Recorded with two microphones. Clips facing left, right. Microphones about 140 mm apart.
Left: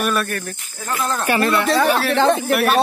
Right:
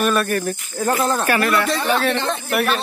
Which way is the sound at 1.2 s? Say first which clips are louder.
Left 1 dB; 25° left (ahead or behind).